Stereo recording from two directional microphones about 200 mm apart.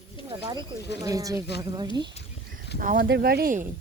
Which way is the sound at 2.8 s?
45° right (ahead or behind).